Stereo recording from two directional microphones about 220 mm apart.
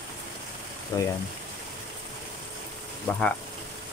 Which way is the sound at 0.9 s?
15° left (ahead or behind).